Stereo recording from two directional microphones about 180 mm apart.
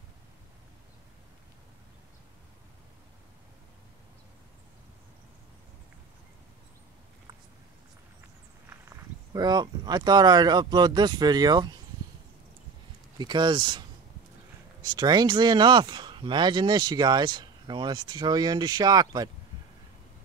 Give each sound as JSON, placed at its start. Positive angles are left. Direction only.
{"t": 8.6, "sound": "speech", "side_deg": -15}
{"t": 13.2, "sound": "speech", "side_deg": -25}